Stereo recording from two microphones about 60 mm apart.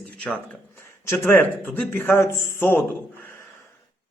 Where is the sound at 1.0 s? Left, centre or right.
Left.